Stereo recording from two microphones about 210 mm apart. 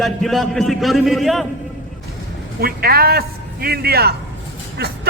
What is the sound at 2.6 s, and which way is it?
A man's voice, 45° right (ahead or behind).